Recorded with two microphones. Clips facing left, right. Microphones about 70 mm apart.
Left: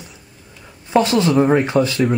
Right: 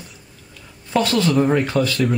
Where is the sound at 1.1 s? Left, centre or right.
Centre.